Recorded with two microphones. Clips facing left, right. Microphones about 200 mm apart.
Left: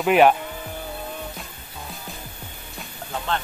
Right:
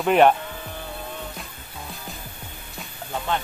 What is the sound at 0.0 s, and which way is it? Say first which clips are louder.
Speech: even; 5° left (ahead or behind).